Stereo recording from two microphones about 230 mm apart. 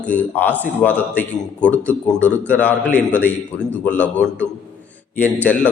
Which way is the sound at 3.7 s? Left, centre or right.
Centre.